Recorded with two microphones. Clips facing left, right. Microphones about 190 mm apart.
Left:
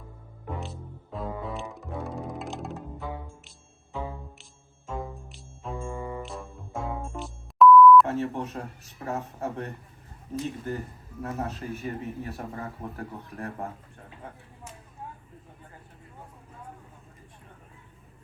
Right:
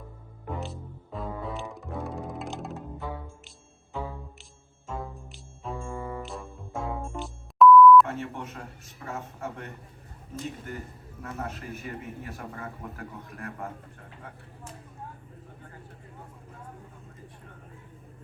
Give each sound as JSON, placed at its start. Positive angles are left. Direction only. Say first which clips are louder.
{"t": 0.4, "sound": "music", "louder": "right 1 dB", "side_deg": 0}
{"t": 5.9, "sound": "music", "louder": "even", "side_deg": 15}
{"t": 6.2, "sound": "beep", "louder": "even", "side_deg": 0}
{"t": 8.0, "sound": "beep", "louder": "left 5 dB", "side_deg": 35}
{"t": 9.0, "sound": "a sound", "louder": "left 4 dB", "side_deg": 35}
{"t": 10.7, "sound": "a man's voice", "louder": "left 5 dB", "side_deg": 35}